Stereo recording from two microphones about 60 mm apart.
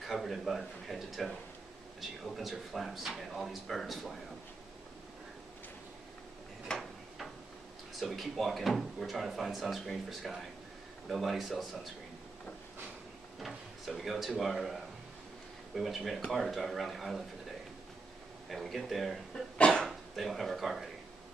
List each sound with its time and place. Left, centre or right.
0.0 s speech: centre
6.7 s tick-tock: centre
8.0 s speech: centre
13.4 s speech: centre
18.5 s speech: centre
19.6 s a sound: centre
19.9 s speech: centre